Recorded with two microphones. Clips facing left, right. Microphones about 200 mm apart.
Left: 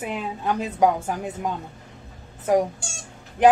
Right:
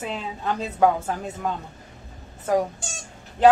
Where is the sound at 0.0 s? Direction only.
15° left (ahead or behind).